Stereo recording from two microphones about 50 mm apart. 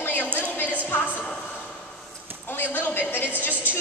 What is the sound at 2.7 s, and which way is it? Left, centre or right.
Speech, left.